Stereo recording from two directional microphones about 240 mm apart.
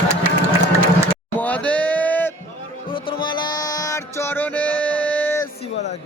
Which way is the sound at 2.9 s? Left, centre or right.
Left.